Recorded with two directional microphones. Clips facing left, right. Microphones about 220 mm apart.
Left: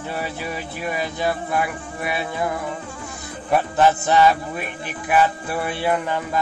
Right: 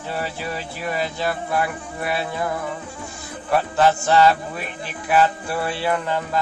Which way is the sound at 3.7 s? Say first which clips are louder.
Even; 20° left (ahead or behind).